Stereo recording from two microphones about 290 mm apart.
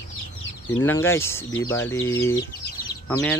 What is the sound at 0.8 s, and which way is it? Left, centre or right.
Speech, centre.